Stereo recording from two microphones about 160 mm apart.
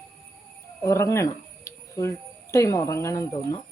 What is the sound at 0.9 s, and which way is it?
Speech, 20° left (ahead or behind).